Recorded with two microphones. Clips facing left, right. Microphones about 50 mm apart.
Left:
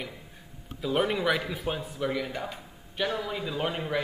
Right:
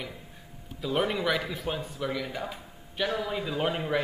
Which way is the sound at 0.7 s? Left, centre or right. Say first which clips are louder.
Left 1 dB; centre.